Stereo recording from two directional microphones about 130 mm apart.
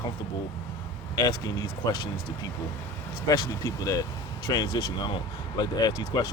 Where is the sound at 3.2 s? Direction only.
35° left (ahead or behind).